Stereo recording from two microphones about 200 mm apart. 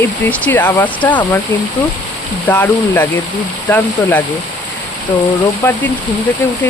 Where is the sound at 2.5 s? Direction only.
10° left (ahead or behind).